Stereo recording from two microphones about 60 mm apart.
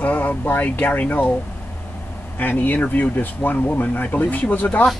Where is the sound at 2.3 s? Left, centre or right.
Left.